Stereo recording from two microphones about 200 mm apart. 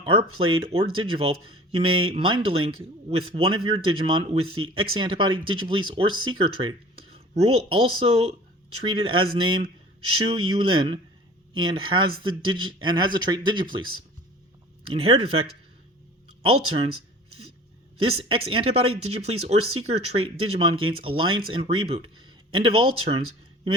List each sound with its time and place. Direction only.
0.0 s speech: 25° right (ahead or behind)
14.8 s speech: 25° right (ahead or behind)
18.0 s speech: 25° right (ahead or behind)